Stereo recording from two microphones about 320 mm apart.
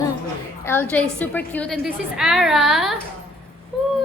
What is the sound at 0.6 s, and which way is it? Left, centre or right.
A woman's voice, centre.